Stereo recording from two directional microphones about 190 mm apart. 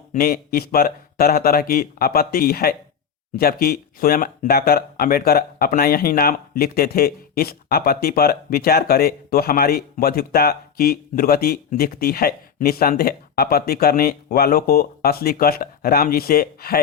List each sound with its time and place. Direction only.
0.1 s speech: 50° left (ahead or behind)